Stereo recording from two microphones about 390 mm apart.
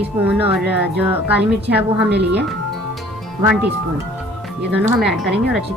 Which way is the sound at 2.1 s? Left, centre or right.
Right.